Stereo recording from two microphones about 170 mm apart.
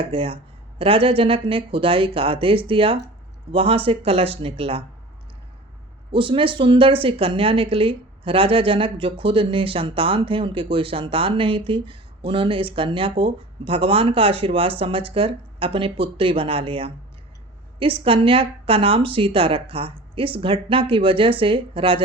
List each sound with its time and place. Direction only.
0.0 s a woman's voice: 35° right (ahead or behind)
6.1 s a woman's voice: 30° right (ahead or behind)